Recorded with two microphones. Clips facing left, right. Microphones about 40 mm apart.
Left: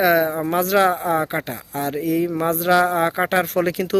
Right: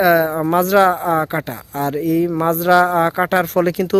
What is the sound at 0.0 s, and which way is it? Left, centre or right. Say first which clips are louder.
Speech: right 3 dB; centre.